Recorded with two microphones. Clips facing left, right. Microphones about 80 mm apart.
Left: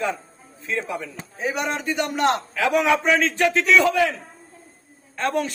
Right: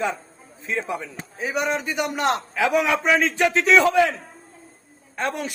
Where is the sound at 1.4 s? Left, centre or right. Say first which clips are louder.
Right 1 dB; centre.